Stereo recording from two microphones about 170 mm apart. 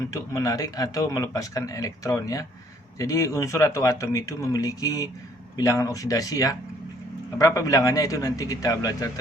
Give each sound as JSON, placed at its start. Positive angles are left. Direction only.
{"t": 0.1, "sound": "speech", "side_deg": 20}